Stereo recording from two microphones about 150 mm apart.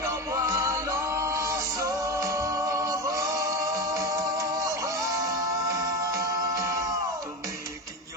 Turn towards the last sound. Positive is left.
turn(degrees=-20)  # may be behind; listen again after turning